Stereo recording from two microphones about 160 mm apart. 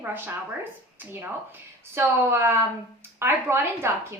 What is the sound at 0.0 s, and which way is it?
A woman's voice, 10° right (ahead or behind).